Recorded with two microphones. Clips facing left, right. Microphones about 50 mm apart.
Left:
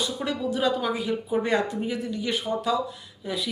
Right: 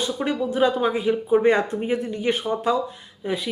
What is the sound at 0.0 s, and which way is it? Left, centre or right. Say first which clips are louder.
Speech: right 4 dB; right.